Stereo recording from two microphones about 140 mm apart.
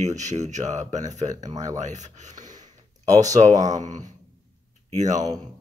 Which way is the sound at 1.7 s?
55° right (ahead or behind).